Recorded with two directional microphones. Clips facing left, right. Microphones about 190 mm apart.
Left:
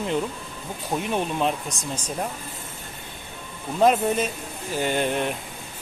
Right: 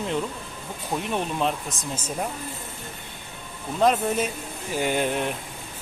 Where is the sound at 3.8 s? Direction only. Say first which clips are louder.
Left 2 dB; 5° left (ahead or behind).